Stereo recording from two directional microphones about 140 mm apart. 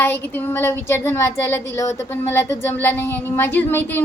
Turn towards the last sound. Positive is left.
turn(degrees=15)  # may be behind; listen again after turning